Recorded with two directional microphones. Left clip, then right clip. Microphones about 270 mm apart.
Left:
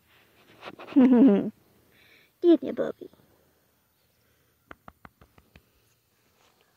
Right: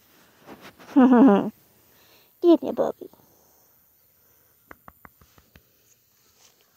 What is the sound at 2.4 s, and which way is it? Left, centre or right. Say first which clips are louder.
Speech: right 3 dB; centre.